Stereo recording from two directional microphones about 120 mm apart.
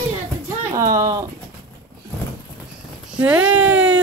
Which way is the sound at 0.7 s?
25° right (ahead or behind).